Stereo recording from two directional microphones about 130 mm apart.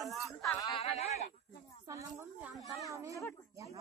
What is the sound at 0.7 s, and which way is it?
Speech, 50° left (ahead or behind).